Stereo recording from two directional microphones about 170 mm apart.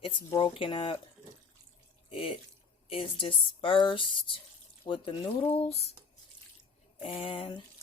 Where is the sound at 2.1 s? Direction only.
30° left (ahead or behind).